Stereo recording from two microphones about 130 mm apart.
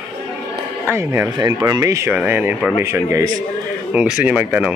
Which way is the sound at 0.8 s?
20° right (ahead or behind).